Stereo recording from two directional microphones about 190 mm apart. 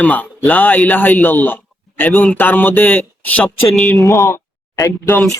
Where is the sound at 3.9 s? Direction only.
15° left (ahead or behind).